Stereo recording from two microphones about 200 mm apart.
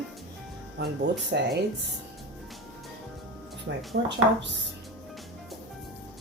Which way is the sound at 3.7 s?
60° right (ahead or behind).